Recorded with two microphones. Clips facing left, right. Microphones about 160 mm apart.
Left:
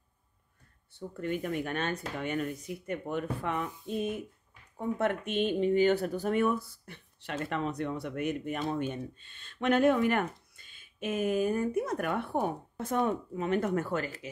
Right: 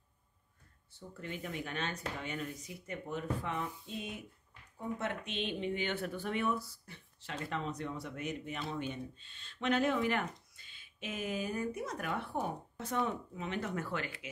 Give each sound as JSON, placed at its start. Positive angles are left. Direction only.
{"t": 0.9, "sound": "speech", "side_deg": 55}